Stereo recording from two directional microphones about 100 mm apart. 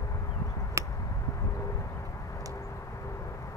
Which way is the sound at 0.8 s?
30° right (ahead or behind).